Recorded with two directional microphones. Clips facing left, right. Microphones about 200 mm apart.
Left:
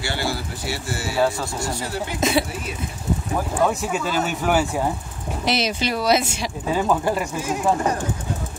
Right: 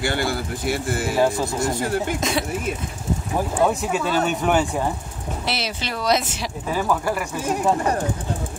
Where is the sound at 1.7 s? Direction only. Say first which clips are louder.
Right 3 dB; 50° right (ahead or behind).